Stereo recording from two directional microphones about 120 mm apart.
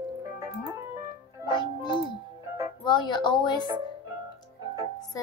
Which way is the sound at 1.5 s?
40° left (ahead or behind).